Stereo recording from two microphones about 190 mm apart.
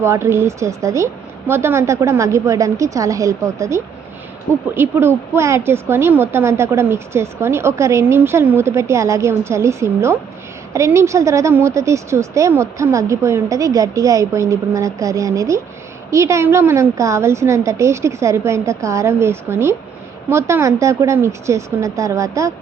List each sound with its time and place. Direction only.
0.0 s speech: 15° right (ahead or behind)